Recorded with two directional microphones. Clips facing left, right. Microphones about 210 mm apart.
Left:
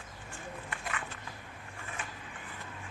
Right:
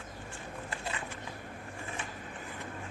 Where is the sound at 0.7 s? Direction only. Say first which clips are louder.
Right 2 dB; 30° right (ahead or behind).